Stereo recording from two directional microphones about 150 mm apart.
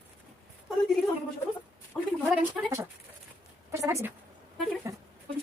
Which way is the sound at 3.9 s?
20° right (ahead or behind).